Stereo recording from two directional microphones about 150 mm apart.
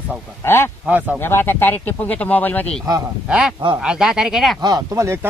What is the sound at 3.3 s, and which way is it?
Speech, 5° right (ahead or behind).